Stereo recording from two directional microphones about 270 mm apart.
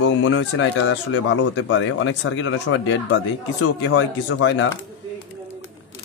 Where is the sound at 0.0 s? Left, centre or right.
Left.